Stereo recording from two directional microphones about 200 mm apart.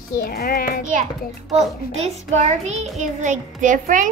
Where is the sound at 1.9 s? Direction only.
35° right (ahead or behind).